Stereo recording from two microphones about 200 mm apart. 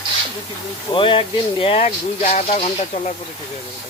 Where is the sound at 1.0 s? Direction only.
25° left (ahead or behind).